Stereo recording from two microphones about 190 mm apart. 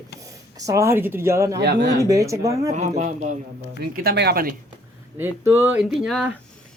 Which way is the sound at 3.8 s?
55° right (ahead or behind).